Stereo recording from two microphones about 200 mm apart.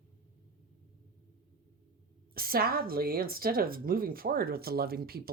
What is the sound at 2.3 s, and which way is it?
Speech, 50° right (ahead or behind).